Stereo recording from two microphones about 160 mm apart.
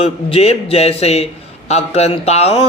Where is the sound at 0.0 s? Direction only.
40° left (ahead or behind).